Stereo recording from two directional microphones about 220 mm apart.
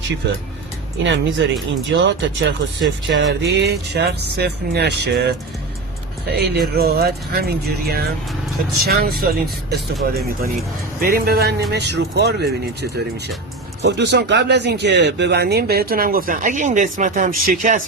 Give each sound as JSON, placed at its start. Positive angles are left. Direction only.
{"t": 1.0, "sound": "speech", "side_deg": -55}